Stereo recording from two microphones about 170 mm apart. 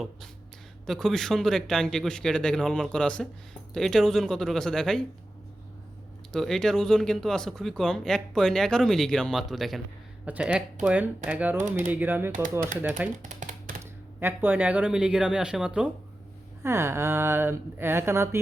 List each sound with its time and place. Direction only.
0.9 s speech: centre (ahead or behind)
6.3 s speech: centre (ahead or behind)
12.3 s speech: 50° right (ahead or behind)
13.2 s a sound: 50° right (ahead or behind)
14.2 s speech: 10° right (ahead or behind)
16.6 s speech: 15° right (ahead or behind)